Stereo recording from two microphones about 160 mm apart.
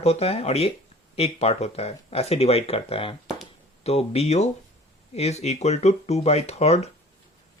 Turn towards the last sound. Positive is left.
turn(degrees=40)  # may be behind; listen again after turning